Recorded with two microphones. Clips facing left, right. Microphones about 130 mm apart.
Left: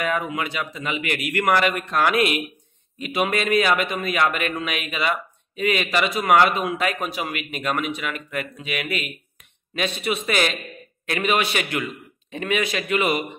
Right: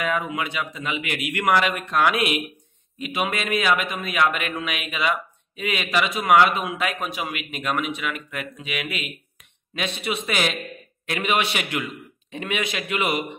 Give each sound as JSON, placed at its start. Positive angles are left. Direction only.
{"t": 0.4, "sound": "a man's voice", "side_deg": -15}